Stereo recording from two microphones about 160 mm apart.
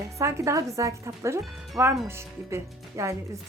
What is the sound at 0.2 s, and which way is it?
Speech, 20° right (ahead or behind).